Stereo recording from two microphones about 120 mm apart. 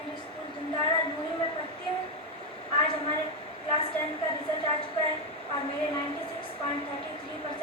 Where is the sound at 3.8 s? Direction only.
50° left (ahead or behind).